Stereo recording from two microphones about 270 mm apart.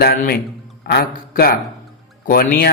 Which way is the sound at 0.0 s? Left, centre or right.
Left.